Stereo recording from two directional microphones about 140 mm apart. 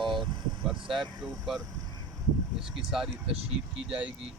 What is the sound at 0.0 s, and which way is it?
Vehicle, 35° right (ahead or behind).